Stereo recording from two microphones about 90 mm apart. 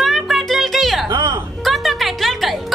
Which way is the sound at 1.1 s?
45° right (ahead or behind).